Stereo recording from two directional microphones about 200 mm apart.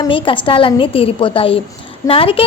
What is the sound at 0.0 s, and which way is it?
A woman's voice, 25° left (ahead or behind).